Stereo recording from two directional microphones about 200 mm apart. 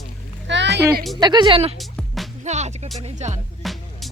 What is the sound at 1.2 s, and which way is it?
Speech, 20° right (ahead or behind).